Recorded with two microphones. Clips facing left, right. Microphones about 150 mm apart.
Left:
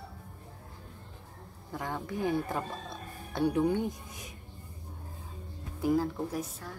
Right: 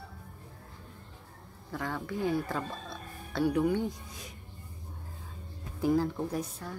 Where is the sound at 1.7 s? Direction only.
15° left (ahead or behind).